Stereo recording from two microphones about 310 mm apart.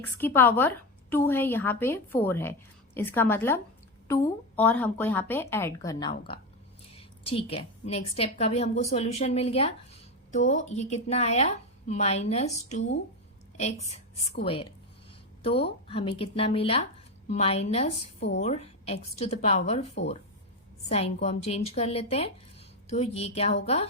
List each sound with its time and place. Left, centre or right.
0.0 s a woman's voice: centre
15.9 s a woman's voice: centre
20.9 s a woman's voice: left